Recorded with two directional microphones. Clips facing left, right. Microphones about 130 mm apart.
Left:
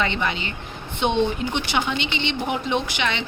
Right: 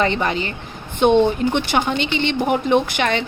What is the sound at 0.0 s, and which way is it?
A woman's voice, 40° right (ahead or behind).